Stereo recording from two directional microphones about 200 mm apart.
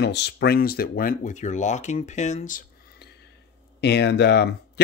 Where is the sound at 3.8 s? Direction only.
55° left (ahead or behind).